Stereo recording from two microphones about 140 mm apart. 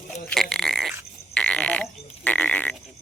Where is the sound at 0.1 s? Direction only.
5° left (ahead or behind).